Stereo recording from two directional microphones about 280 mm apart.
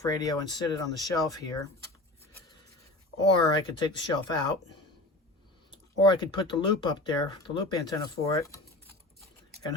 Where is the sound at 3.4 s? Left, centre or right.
Centre.